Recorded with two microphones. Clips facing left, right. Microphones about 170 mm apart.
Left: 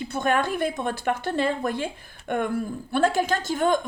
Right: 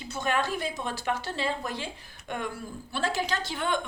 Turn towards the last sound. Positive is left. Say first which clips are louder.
# left 7 dB
turn(degrees=45)  # may be behind; listen again after turning